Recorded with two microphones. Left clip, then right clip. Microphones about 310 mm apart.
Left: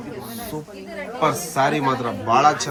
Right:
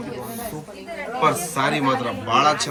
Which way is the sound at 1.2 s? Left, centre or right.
Left.